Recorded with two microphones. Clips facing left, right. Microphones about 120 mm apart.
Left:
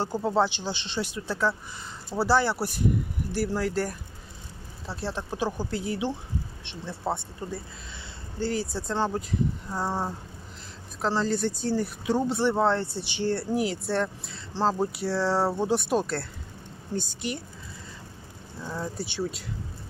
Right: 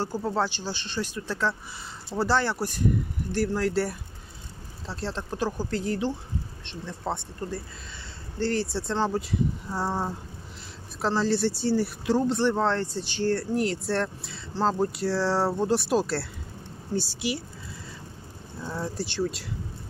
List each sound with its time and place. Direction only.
0.0 s speech: 20° left (ahead or behind); by 17.4 s 5° right (ahead or behind)
18.6 s speech: 5° right (ahead or behind)